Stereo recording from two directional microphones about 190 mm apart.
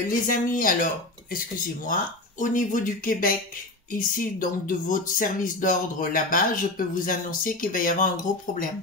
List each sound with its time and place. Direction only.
0.1 s speech: 45° left (ahead or behind)